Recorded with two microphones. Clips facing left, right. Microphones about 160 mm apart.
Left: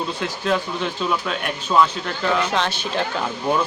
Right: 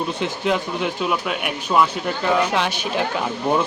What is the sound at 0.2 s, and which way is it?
Speech, 15° right (ahead or behind).